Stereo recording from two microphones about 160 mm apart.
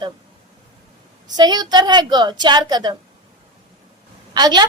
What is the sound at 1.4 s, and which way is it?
A woman's voice, 25° right (ahead or behind).